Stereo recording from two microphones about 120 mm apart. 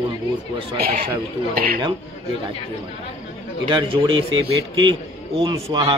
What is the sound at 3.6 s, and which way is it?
A man's voice, 45° right (ahead or behind).